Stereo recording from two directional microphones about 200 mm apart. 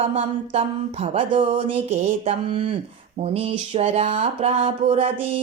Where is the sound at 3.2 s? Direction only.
30° right (ahead or behind).